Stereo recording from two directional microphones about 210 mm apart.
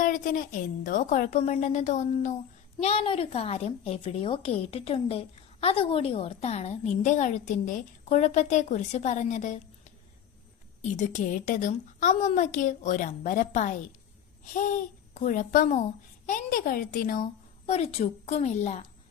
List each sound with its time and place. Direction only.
0.0 s a woman's voice: 40° left (ahead or behind)
10.9 s a woman's voice: 35° left (ahead or behind)
15.1 s a woman's voice: 35° left (ahead or behind)
17.7 s a woman's voice: 30° left (ahead or behind)